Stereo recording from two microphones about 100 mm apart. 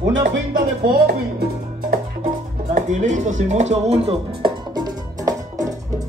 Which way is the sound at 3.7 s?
90° right.